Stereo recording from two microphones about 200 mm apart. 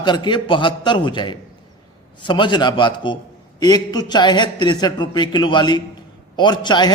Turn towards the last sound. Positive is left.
turn(degrees=20)  # may be behind; listen again after turning